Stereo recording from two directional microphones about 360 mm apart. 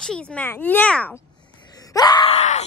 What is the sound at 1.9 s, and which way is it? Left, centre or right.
Groan, centre.